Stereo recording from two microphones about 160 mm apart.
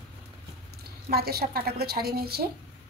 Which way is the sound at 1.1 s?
75° right (ahead or behind).